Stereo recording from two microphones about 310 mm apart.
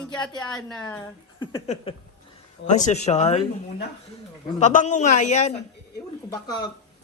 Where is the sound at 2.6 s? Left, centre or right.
Left.